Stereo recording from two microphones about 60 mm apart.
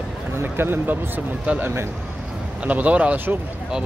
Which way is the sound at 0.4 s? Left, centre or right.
Right.